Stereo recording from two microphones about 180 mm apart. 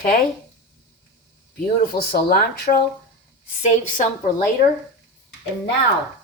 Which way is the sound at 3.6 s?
40° left (ahead or behind).